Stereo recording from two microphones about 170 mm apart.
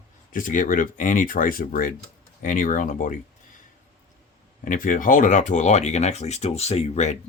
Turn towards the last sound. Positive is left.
turn(degrees=40)  # may be behind; listen again after turning